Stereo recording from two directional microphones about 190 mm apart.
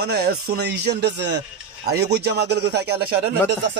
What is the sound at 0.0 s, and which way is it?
Speech, 55° right (ahead or behind).